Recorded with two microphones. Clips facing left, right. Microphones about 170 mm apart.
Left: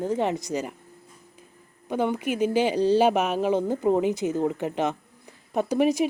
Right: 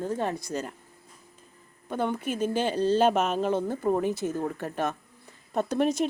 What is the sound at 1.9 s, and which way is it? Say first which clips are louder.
Speech: left 3 dB; 15° left (ahead or behind).